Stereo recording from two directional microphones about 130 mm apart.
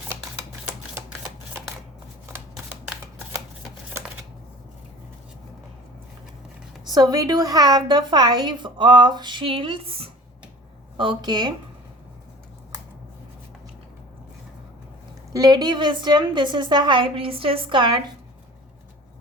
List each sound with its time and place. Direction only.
6.8 s a woman's voice: 30° right (ahead or behind)
15.3 s a woman's voice: 30° right (ahead or behind)